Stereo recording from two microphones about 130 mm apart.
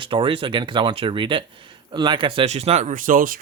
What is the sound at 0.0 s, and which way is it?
A man's voice, 40° right (ahead or behind).